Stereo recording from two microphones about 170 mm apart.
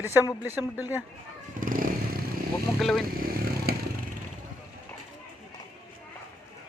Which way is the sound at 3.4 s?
65° right (ahead or behind).